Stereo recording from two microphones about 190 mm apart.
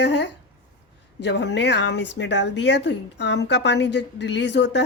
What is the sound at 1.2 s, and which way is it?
Speech, 65° left (ahead or behind).